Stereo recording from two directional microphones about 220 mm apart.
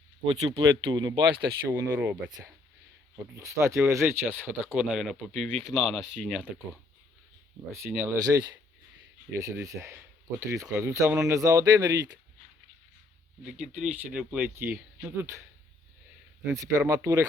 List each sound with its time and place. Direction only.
0.5 s speech: 20° right (ahead or behind)
1.8 s speech: 5° right (ahead or behind)
4.4 s speech: centre (ahead or behind)
7.7 s speech: 10° right (ahead or behind)
13.4 s speech: 5° right (ahead or behind)
16.4 s speech: 10° right (ahead or behind)